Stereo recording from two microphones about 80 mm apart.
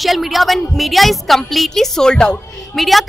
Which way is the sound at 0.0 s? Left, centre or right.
Centre.